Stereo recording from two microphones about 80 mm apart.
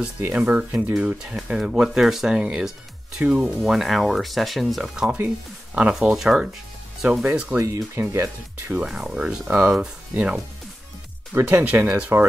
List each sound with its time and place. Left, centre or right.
0.6 s speech: right
0.9 s speech: centre
7.5 s speech: right
8.5 s speech: right
8.8 s speech: centre
9.4 s speech: right
9.7 s speech: centre
11.3 s speech: right